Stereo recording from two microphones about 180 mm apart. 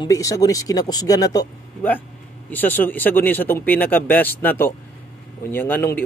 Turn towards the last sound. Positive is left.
turn(degrees=10)  # may be behind; listen again after turning